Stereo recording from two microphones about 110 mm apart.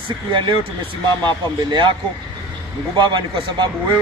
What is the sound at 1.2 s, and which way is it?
Speech, 45° right (ahead or behind).